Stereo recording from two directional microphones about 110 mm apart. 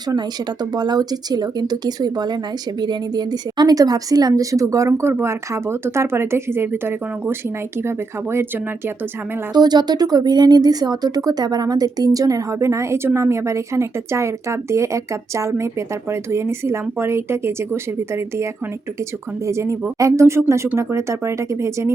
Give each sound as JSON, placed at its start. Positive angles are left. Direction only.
{"t": 0.1, "sound": "speech", "side_deg": -40}
{"t": 9.5, "sound": "speech", "side_deg": -40}
{"t": 19.5, "sound": "speech", "side_deg": -25}